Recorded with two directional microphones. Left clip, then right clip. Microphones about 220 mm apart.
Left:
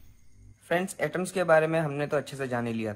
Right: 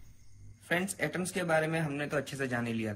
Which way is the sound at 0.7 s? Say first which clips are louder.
Left 4 dB; 20° left (ahead or behind).